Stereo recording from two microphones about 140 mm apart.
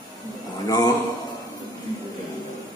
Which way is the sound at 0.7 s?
25° left (ahead or behind).